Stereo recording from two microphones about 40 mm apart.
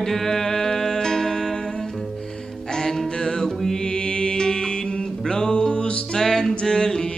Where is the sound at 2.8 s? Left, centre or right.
Centre.